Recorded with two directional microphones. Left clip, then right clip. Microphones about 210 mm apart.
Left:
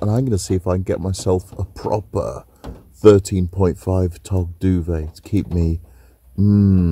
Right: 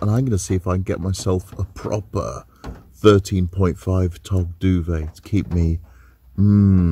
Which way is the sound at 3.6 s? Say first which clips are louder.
Left 3 dB; 45° right (ahead or behind).